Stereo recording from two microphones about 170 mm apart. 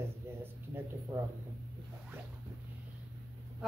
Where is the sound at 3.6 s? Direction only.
Centre (ahead or behind).